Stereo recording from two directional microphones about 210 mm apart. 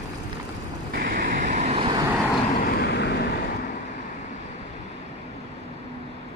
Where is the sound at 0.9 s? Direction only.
45° right (ahead or behind); by 2.0 s 25° right (ahead or behind).